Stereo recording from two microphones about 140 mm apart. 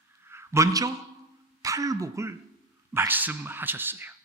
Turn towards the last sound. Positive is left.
turn(degrees=-15)  # may be behind; listen again after turning